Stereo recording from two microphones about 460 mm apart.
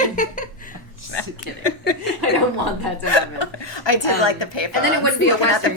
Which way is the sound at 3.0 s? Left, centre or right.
Left.